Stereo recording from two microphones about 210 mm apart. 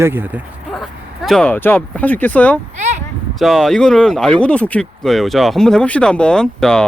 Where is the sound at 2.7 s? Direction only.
35° right (ahead or behind).